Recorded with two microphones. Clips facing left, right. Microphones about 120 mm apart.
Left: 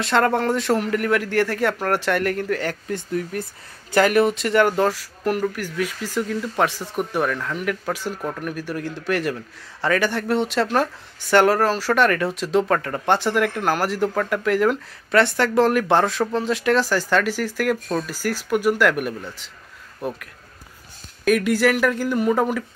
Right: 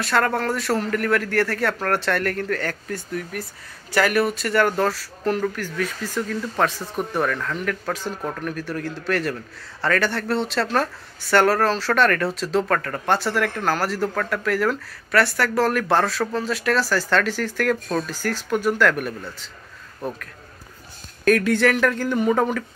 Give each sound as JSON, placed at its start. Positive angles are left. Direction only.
{"t": 0.0, "sound": "a man's voice", "side_deg": 20}